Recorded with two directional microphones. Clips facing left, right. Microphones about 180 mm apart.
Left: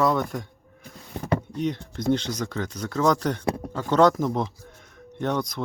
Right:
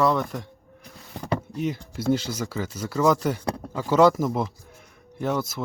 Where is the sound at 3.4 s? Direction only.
20° left (ahead or behind).